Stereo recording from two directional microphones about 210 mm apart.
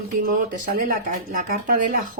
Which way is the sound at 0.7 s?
40° right (ahead or behind).